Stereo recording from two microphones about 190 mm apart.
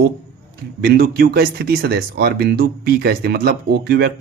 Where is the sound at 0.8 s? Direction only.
55° right (ahead or behind).